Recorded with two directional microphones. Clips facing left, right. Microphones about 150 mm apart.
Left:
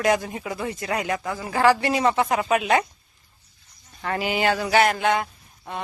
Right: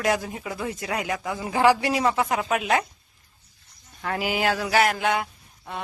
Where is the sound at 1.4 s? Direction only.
15° right (ahead or behind).